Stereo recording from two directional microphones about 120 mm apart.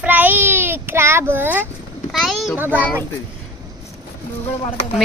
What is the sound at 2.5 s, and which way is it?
Speech, 15° right (ahead or behind).